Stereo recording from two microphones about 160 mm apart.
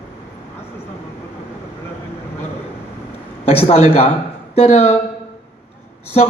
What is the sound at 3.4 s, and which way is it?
A man's voice, 40° left (ahead or behind).